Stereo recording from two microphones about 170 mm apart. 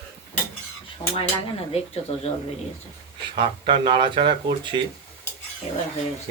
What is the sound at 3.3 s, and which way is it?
Speech, 30° right (ahead or behind).